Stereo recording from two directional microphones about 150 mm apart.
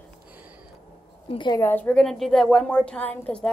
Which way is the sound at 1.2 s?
30° left (ahead or behind).